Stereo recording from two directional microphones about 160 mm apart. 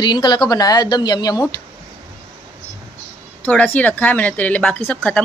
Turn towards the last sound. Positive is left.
turn(degrees=5)  # may be behind; listen again after turning